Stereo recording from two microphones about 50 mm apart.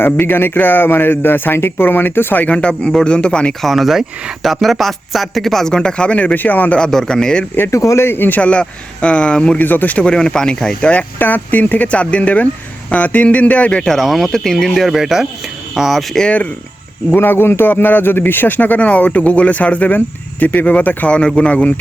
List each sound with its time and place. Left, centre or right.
0.0 s speech: left
2.5 s speech: left
3.6 s speech: centre; by 6.7 s left
6.7 s speech: centre
7.7 s speech: left
8.0 s speech: left
8.4 s speech: left
9.6 s speech: left
10.0 s speech: centre
11.2 s speech: left
13.8 s speech: centre
14.7 s speech: centre
17.2 s speech: left